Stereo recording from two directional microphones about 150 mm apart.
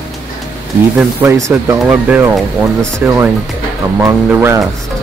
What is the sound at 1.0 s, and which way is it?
Speech, 15° right (ahead or behind).